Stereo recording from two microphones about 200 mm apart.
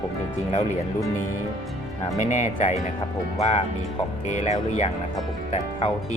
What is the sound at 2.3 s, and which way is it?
Speech, 35° left (ahead or behind).